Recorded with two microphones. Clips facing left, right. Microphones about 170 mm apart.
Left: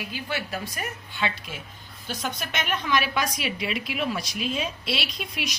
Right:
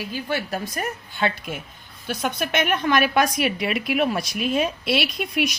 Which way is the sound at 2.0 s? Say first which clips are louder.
Right 6 dB; 60° right (ahead or behind).